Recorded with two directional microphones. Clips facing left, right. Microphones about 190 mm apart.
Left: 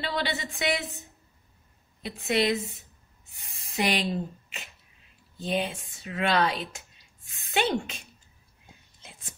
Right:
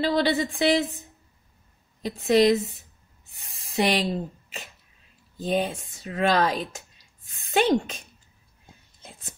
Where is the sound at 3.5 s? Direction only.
30° right (ahead or behind).